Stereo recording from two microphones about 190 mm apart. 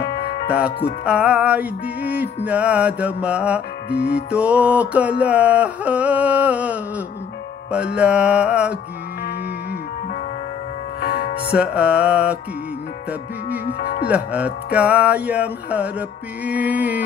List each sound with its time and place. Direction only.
0.0 s music: 55° left (ahead or behind)
0.5 s music: 5° right (ahead or behind)
11.0 s music: 55° left (ahead or behind)
11.5 s music: 5° right (ahead or behind)
13.5 s music: 60° left (ahead or behind)
14.0 s music: 5° right (ahead or behind)